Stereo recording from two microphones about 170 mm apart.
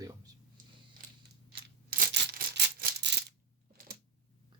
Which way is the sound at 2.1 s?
75° right (ahead or behind).